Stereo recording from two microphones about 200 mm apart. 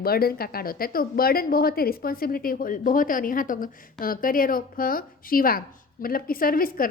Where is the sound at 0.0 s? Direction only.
50° left (ahead or behind).